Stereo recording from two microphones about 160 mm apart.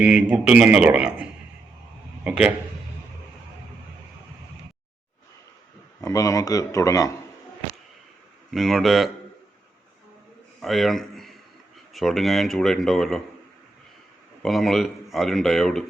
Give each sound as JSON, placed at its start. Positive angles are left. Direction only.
{"t": 0.0, "sound": "speech", "side_deg": -5}
{"t": 6.0, "sound": "speech", "side_deg": 20}
{"t": 8.4, "sound": "speech", "side_deg": 0}
{"t": 10.6, "sound": "a sound", "side_deg": 0}
{"t": 11.9, "sound": "speech", "side_deg": 0}
{"t": 14.4, "sound": "speech", "side_deg": 0}